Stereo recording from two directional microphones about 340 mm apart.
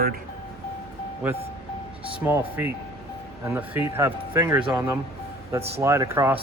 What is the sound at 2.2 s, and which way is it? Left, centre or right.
Speech, centre.